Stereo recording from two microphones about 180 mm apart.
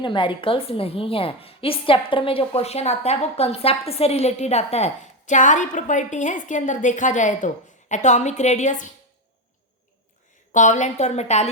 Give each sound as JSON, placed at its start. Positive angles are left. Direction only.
{"t": 0.0, "sound": "a woman's voice", "side_deg": 25}
{"t": 10.5, "sound": "a woman's voice", "side_deg": 45}